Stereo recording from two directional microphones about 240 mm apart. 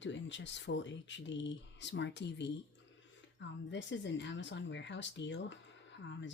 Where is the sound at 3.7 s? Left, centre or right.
Left.